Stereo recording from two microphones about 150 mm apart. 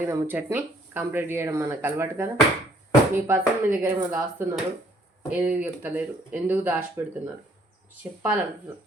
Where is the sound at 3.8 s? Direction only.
15° right (ahead or behind).